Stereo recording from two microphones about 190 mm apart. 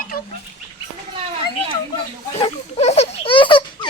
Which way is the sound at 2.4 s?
35° left (ahead or behind).